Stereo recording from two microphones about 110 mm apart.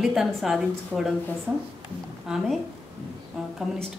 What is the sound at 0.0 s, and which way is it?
A woman's voice, 5° right (ahead or behind).